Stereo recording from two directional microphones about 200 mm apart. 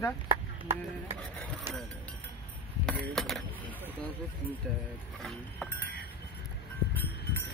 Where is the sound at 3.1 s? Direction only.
Centre (ahead or behind).